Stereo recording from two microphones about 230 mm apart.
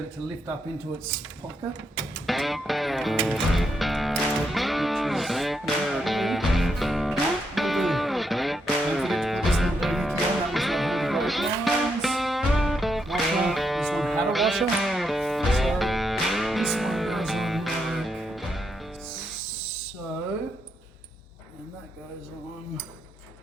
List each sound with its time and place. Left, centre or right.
2.2 s music: centre